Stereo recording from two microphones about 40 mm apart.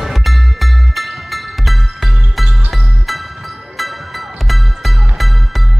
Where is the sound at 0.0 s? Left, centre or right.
Centre.